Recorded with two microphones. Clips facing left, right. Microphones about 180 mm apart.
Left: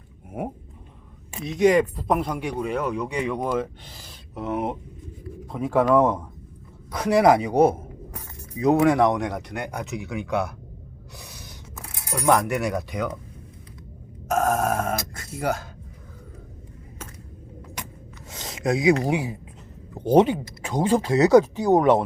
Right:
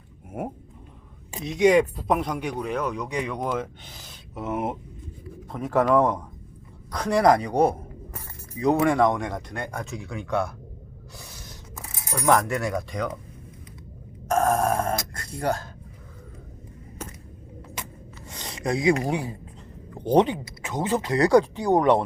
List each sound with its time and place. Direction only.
0.4 s speech: centre (ahead or behind)
11.2 s a sound: centre (ahead or behind)
12.2 s speech: 5° left (ahead or behind)
14.3 s grunt: centre (ahead or behind)
18.4 s a sound: 5° left (ahead or behind)
19.0 s speech: 10° left (ahead or behind)